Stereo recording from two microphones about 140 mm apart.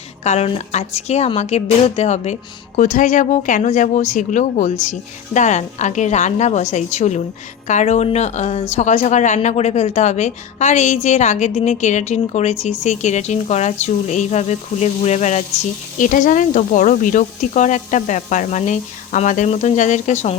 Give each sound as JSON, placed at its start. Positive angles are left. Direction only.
{"t": 0.3, "sound": "speech", "side_deg": 50}
{"t": 16.0, "sound": "speech", "side_deg": 70}